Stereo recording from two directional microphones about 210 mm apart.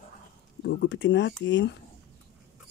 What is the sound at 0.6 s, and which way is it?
Speech, 55° left (ahead or behind).